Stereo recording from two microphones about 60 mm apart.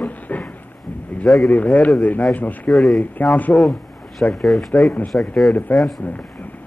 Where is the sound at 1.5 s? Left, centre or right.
Left.